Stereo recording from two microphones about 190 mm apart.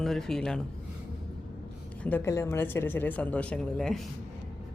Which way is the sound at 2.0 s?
10° left (ahead or behind).